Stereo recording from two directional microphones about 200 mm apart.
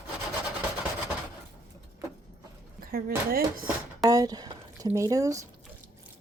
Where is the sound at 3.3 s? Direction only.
45° right (ahead or behind).